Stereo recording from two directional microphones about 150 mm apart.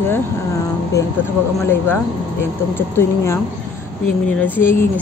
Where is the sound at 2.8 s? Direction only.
15° left (ahead or behind).